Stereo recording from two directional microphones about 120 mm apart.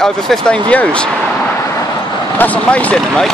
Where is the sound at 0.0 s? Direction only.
5° left (ahead or behind).